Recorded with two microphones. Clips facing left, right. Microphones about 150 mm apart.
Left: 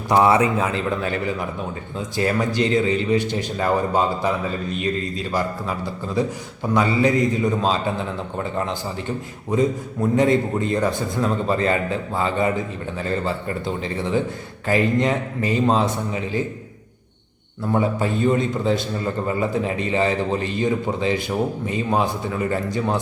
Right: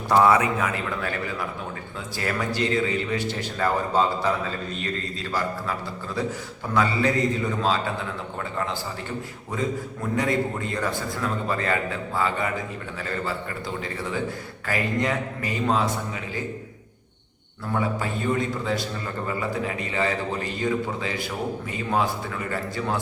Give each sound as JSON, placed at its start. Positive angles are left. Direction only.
{"t": 0.1, "sound": "a man's voice", "side_deg": 20}
{"t": 6.2, "sound": "a man's voice", "side_deg": 15}
{"t": 9.5, "sound": "a man's voice", "side_deg": 20}
{"t": 17.7, "sound": "a man's voice", "side_deg": 25}